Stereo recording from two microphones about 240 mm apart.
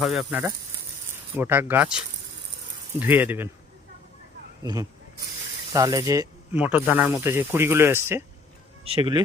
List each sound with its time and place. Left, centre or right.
0.0 s speech: centre
3.0 s speech: centre
4.6 s speech: centre